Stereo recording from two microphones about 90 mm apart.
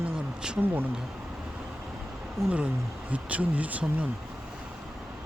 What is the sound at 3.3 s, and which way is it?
Speech, 15° right (ahead or behind).